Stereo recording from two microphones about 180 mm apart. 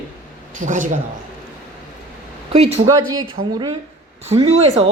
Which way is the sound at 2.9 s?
20° right (ahead or behind).